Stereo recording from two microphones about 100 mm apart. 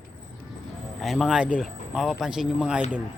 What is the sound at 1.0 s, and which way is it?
Speech, centre (ahead or behind).